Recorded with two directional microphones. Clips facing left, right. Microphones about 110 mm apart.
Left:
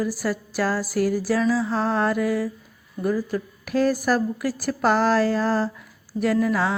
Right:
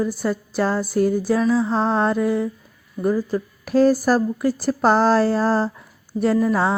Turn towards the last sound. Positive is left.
turn(degrees=-30)  # may be behind; listen again after turning